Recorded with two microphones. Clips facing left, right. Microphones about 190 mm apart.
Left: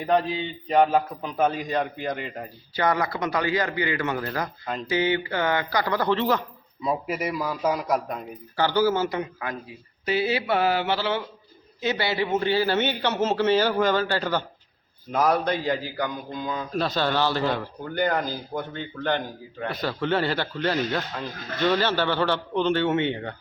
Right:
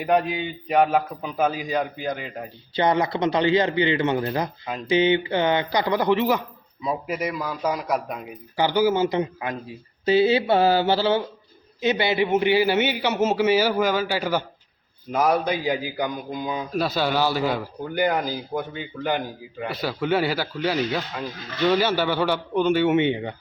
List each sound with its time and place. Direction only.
0.0 s a man's voice: 10° right (ahead or behind)
2.7 s speech: 20° right (ahead or behind)
6.8 s a man's voice: 5° left (ahead or behind); by 11.2 s 30° right (ahead or behind)
11.8 s a man's voice: 20° right (ahead or behind)